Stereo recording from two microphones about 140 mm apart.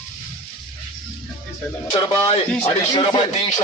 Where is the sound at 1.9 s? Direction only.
35° left (ahead or behind).